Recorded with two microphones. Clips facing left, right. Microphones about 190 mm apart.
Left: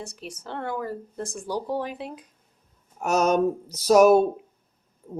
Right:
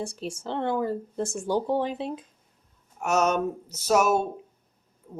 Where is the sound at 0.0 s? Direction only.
30° right (ahead or behind).